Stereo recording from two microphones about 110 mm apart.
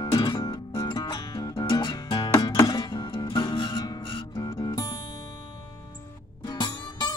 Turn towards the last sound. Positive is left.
turn(degrees=40)  # may be behind; listen again after turning